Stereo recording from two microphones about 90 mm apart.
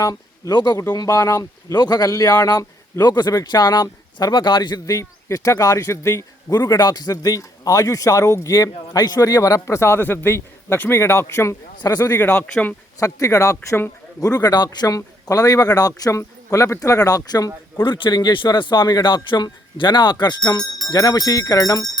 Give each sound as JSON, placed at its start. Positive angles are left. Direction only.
{"t": 0.0, "sound": "a man's voice", "side_deg": 40}
{"t": 0.9, "sound": "a man's voice", "side_deg": 40}
{"t": 4.9, "sound": "a man's voice", "side_deg": 35}
{"t": 6.7, "sound": "a man's voice", "side_deg": 50}
{"t": 11.8, "sound": "speech", "side_deg": 45}
{"t": 12.1, "sound": "speech", "side_deg": 25}
{"t": 13.0, "sound": "a man's voice", "side_deg": 35}
{"t": 14.3, "sound": "a man's voice", "side_deg": 45}
{"t": 17.8, "sound": "a man's voice", "side_deg": 60}